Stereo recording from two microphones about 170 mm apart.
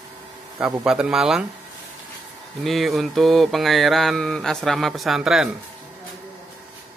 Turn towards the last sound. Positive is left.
turn(degrees=-5)  # may be behind; listen again after turning